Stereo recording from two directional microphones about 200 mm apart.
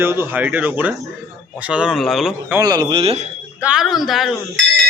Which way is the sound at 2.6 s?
20° right (ahead or behind).